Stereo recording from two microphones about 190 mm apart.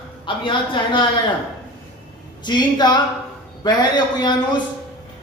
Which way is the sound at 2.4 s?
25° left (ahead or behind).